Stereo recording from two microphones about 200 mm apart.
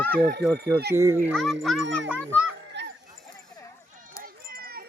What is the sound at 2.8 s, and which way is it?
Dog, 60° right (ahead or behind).